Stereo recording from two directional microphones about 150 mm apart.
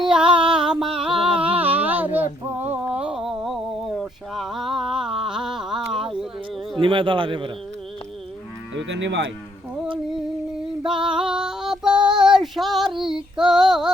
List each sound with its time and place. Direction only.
0.0 s a sound: 5° right (ahead or behind)
6.7 s a man's voice: 35° right (ahead or behind)
10.8 s female singing: 5° right (ahead or behind)